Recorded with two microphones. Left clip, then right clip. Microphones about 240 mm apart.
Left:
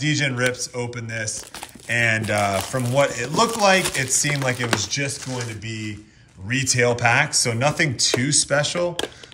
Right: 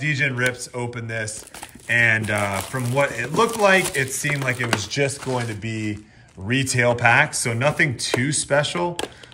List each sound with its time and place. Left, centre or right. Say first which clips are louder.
0.0 s speech: even; centre
5.6 s speech: right 2 dB; centre
6.4 s speech: even; centre